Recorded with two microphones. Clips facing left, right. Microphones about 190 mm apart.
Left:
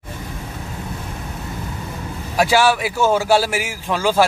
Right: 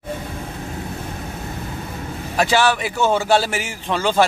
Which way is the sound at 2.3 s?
10° left (ahead or behind).